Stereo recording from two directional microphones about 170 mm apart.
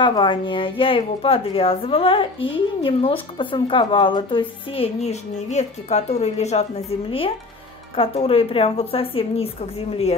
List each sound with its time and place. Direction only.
0.0 s a woman's voice: 30° left (ahead or behind)